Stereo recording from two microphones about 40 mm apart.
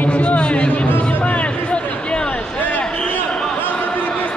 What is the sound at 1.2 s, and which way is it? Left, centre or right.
Music, left.